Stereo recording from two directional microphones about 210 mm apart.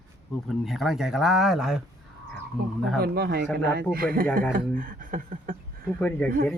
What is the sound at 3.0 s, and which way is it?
Speech, 50° right (ahead or behind).